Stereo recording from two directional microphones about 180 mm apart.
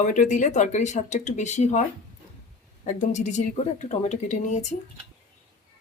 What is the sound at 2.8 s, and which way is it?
Speech, 45° left (ahead or behind).